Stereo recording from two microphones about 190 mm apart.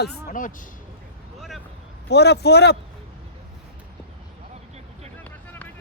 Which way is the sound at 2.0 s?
60° left (ahead or behind).